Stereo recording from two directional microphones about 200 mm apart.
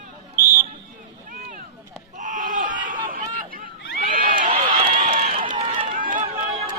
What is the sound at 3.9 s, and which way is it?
Crowd, 45° right (ahead or behind).